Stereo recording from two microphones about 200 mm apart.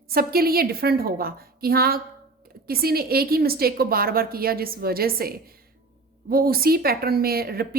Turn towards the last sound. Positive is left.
turn(degrees=-50)  # may be behind; listen again after turning